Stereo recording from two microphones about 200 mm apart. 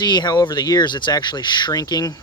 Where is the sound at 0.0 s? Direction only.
20° left (ahead or behind).